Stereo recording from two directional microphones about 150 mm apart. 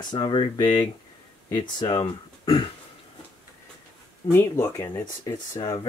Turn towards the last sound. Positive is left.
turn(degrees=25)  # may be behind; listen again after turning